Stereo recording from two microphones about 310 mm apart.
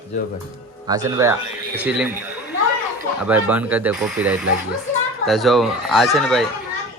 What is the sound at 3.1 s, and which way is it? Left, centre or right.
Speech, centre.